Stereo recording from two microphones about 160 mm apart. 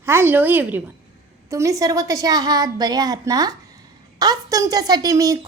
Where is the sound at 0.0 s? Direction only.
15° right (ahead or behind).